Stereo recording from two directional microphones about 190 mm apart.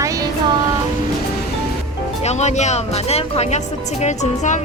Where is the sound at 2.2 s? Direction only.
35° left (ahead or behind).